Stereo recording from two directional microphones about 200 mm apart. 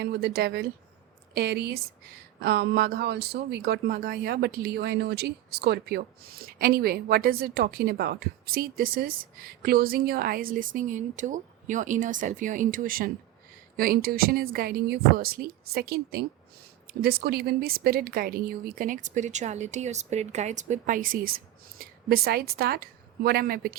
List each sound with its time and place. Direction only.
0.0 s speech: 55° right (ahead or behind)